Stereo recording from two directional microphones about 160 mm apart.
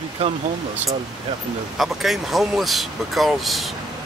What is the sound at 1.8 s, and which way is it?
Speech, centre (ahead or behind).